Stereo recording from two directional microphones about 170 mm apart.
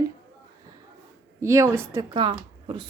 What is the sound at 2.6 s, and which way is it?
Speech, 30° right (ahead or behind).